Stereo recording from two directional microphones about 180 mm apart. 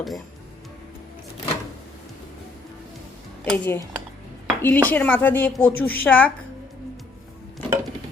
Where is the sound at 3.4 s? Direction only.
10° left (ahead or behind).